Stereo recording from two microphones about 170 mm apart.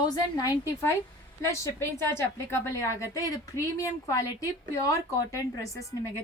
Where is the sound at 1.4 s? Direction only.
15° left (ahead or behind).